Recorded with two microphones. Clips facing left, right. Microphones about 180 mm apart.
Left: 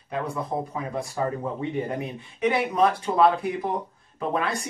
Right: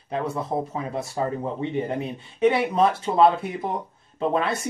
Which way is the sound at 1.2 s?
25° right (ahead or behind).